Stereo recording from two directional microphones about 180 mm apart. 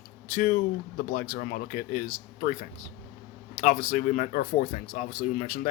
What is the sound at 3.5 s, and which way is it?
Speech, 40° left (ahead or behind).